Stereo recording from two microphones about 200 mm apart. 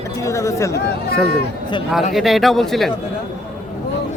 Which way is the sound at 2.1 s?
Centre (ahead or behind).